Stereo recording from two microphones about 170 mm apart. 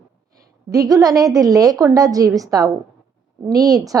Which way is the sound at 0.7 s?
20° right (ahead or behind).